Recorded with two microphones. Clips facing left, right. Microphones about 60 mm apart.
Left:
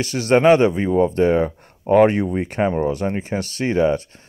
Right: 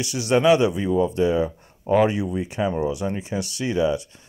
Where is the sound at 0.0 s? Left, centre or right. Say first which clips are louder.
Left 4 dB; left.